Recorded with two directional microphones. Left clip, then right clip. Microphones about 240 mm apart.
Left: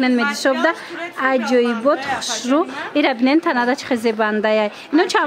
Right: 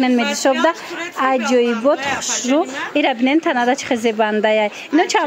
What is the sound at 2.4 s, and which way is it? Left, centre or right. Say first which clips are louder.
Speech: right 1 dB; centre.